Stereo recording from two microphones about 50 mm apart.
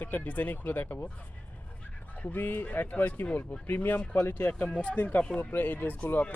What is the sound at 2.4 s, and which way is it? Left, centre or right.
Speech, left.